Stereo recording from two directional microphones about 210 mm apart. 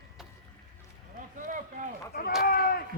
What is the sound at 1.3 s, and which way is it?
Run, 40° right (ahead or behind).